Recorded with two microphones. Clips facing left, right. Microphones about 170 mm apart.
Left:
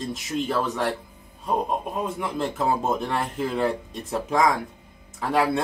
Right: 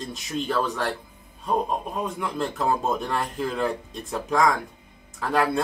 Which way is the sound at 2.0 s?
5° left (ahead or behind).